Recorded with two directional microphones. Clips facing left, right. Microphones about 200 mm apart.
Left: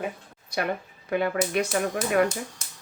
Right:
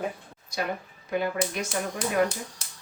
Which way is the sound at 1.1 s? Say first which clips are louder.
Left 3 dB; 60° left (ahead or behind).